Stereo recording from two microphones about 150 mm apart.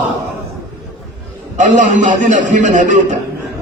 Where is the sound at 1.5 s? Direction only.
55° right (ahead or behind).